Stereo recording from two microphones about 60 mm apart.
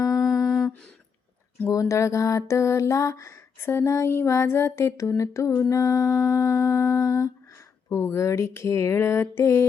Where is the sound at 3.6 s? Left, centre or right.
Left.